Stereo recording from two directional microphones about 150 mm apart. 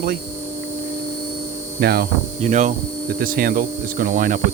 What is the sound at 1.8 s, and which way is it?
Hum, 90° right.